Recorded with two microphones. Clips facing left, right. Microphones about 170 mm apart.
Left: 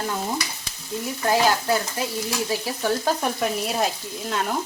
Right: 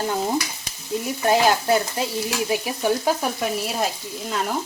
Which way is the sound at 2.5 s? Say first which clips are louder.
Right 3 dB; 15° right (ahead or behind).